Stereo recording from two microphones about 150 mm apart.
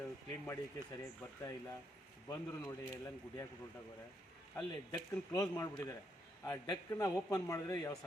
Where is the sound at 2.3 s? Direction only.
20° left (ahead or behind).